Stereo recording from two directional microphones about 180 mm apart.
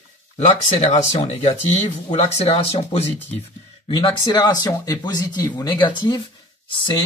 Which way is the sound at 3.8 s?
25° left (ahead or behind).